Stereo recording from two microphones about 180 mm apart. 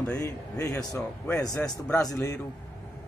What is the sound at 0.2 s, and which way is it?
Speech, 15° left (ahead or behind).